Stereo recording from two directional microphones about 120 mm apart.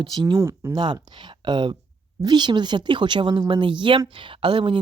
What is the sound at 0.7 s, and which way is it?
Speech, 40° right (ahead or behind).